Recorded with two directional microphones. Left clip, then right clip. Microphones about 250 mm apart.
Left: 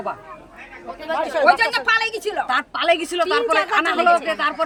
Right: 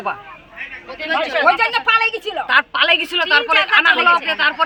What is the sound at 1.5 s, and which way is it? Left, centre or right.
Speech, right.